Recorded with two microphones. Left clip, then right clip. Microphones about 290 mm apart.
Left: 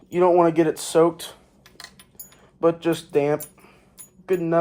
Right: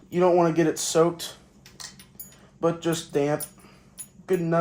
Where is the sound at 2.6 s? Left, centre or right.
Centre.